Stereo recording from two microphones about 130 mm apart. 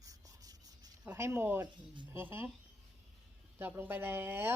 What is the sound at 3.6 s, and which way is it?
Speech, 15° right (ahead or behind).